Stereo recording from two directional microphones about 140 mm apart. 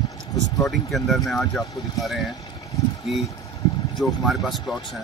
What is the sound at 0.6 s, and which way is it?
Speech, centre (ahead or behind).